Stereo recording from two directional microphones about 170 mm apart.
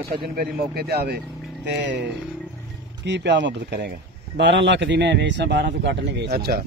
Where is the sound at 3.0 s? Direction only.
90° right; by 6.6 s 65° right (ahead or behind).